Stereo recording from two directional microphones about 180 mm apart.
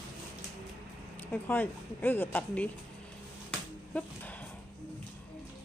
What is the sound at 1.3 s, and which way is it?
Speech, 10° left (ahead or behind).